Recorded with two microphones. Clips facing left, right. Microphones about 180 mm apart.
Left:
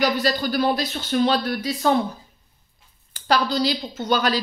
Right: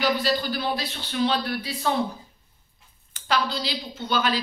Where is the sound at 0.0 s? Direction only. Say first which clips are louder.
Left 2 dB; 45° left (ahead or behind).